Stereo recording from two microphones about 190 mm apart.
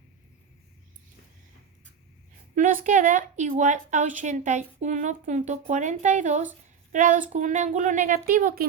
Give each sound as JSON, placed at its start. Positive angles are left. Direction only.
{"t": 2.6, "sound": "a woman's voice", "side_deg": -45}